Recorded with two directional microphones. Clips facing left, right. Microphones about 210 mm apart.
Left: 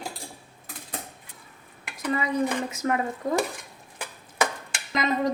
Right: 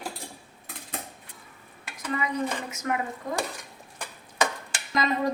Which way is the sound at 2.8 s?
25° left (ahead or behind).